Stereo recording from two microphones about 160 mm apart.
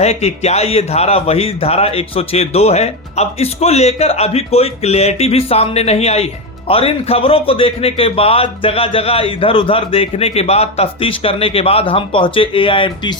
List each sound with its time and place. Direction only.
0.0 s speech: 40° left (ahead or behind)